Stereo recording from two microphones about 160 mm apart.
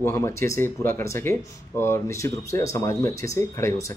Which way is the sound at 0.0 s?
15° left (ahead or behind).